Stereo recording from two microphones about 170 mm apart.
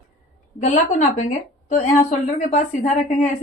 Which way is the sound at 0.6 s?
45° left (ahead or behind).